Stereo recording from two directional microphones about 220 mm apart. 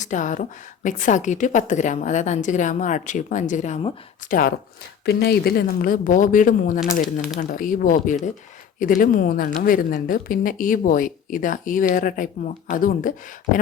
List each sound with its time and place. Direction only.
0.0 s a woman's voice: 35° left (ahead or behind)